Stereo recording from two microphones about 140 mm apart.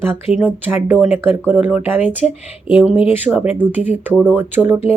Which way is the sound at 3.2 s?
10° right (ahead or behind).